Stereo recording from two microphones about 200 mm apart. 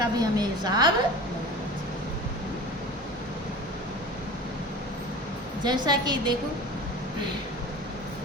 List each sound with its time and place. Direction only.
0.0 s a woman's voice: 20° right (ahead or behind)
5.6 s a woman's voice: 20° right (ahead or behind)